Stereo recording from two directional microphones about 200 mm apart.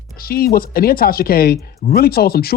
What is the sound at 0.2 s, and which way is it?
Speech, 50° left (ahead or behind).